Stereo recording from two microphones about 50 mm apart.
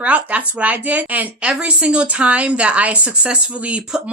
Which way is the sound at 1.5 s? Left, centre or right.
Right.